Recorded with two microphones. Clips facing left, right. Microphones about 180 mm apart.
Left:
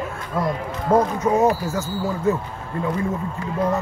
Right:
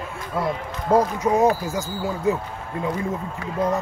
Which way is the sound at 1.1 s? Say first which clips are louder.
Left 1 dB; 15° right (ahead or behind).